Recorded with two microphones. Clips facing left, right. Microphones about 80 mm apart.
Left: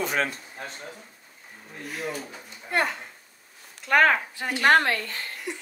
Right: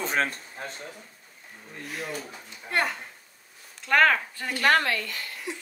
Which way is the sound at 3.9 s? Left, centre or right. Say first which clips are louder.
Left 1 dB; centre.